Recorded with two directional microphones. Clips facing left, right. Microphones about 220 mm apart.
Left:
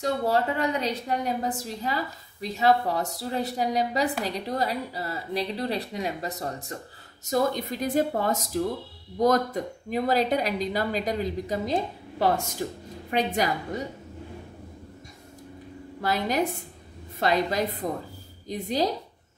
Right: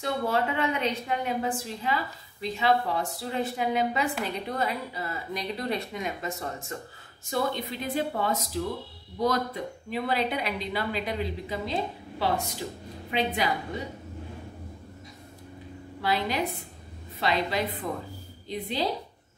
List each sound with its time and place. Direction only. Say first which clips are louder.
0.0 s a woman's voice: left 3 dB; 35° left (ahead or behind)
16.0 s speech: left 2 dB; 45° left (ahead or behind)